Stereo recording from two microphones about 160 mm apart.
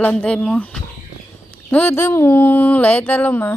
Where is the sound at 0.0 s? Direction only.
5° left (ahead or behind).